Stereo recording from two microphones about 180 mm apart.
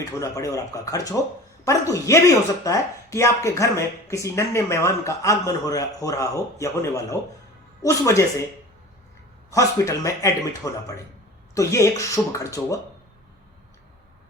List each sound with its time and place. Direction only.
0.0 s speech: 15° left (ahead or behind)
9.5 s speech: 20° left (ahead or behind)